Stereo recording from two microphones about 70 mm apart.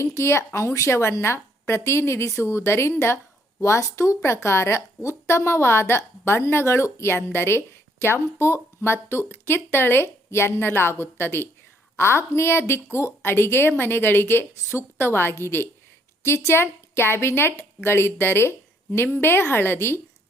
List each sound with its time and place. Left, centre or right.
0.0 s a woman's voice: left